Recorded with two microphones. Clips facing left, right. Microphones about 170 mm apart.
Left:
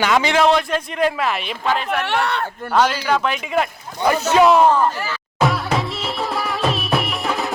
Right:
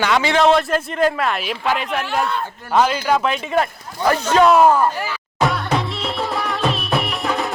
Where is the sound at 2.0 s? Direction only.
80° left.